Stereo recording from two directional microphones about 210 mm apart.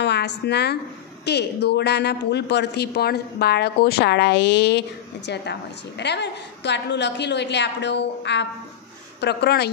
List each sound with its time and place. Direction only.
0.0 s a woman's voice: 55° left (ahead or behind)